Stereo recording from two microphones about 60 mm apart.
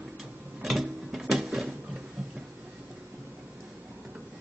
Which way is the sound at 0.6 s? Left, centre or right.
Centre.